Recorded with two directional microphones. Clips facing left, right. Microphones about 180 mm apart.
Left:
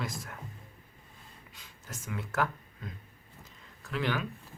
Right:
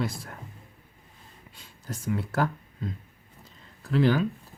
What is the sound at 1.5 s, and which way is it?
Speech, 35° right (ahead or behind).